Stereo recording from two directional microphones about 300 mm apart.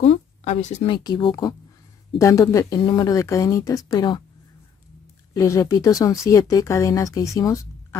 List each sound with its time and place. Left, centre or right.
0.0 s speech: left
5.3 s speech: centre